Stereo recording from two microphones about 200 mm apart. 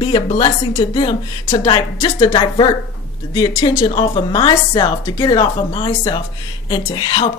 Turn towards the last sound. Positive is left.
turn(degrees=20)  # may be behind; listen again after turning